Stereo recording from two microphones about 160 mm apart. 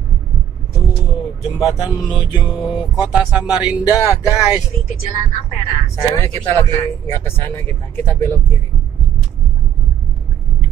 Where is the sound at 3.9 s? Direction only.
20° left (ahead or behind).